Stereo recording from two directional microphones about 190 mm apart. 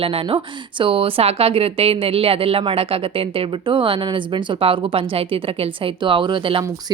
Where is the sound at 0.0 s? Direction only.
30° right (ahead or behind).